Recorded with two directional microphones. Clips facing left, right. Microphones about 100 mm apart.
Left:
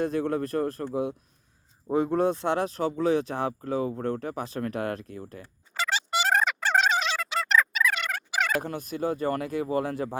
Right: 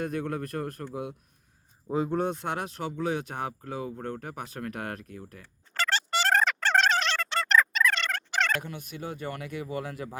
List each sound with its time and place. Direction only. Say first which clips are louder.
0.0 s speech: left 5 dB; 30° left (ahead or behind)
1.9 s speech: left 4 dB; 35° left (ahead or behind)
5.7 s music: even; 5° left (ahead or behind)
8.6 s speech: left 8 dB; 40° left (ahead or behind)